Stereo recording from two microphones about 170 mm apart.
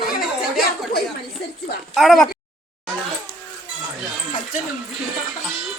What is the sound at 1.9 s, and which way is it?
Speech, centre (ahead or behind).